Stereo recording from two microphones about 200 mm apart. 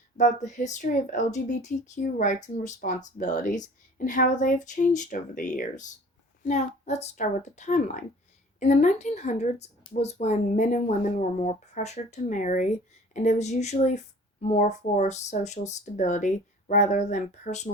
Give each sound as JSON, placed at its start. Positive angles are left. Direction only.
{"t": 0.2, "sound": "speech", "side_deg": 40}